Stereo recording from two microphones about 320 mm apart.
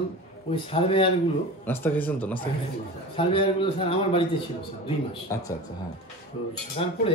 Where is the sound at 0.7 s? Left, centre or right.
Centre.